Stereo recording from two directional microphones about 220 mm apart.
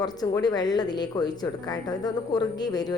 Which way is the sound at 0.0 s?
20° left (ahead or behind).